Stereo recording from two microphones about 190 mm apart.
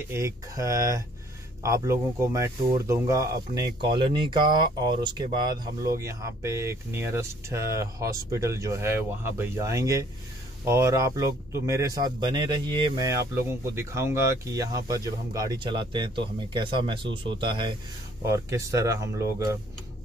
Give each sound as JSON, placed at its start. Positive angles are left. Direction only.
{"t": 0.1, "sound": "speech", "side_deg": -15}